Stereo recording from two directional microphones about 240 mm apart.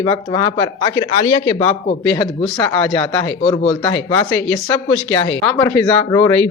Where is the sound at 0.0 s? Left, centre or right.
Centre.